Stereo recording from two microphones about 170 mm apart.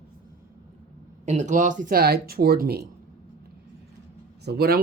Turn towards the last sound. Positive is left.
turn(degrees=-65)  # may be behind; listen again after turning